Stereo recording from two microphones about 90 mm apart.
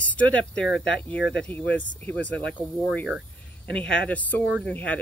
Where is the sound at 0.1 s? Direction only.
15° left (ahead or behind).